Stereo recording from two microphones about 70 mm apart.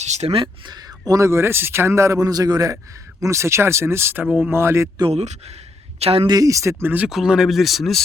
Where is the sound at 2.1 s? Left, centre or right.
Right.